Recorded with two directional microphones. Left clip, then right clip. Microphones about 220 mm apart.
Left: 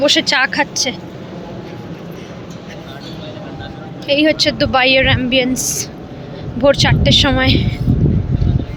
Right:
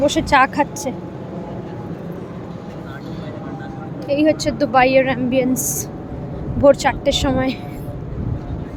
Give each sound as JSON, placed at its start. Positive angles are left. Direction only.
{"t": 0.0, "sound": "a woman's voice", "side_deg": -5}
{"t": 4.0, "sound": "a woman's voice", "side_deg": 5}